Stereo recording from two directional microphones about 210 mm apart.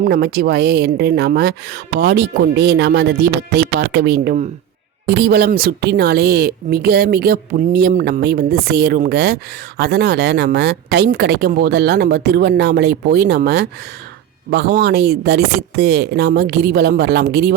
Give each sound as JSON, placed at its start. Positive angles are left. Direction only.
{"t": 0.0, "sound": "speech", "side_deg": -50}